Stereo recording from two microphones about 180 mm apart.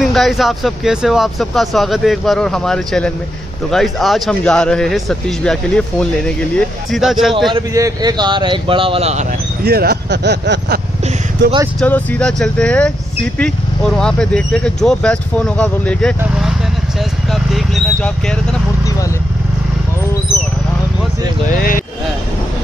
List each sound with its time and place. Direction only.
0.0 s speech: centre (ahead or behind)
7.5 s speech: 20° right (ahead or behind)
9.7 s speech: 60° right (ahead or behind)
11.8 s speech: 10° left (ahead or behind)
21.5 s speech: 50° left (ahead or behind)